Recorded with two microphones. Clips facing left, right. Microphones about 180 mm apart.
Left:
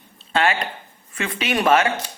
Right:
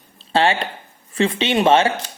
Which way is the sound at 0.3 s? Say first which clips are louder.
Right 3 dB; 30° right (ahead or behind).